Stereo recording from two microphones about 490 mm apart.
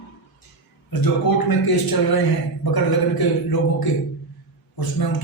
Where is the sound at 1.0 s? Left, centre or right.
Left.